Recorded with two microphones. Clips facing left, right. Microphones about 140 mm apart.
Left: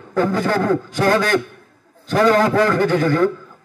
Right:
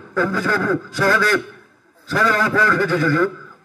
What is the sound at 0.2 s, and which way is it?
Speech, 45° left (ahead or behind).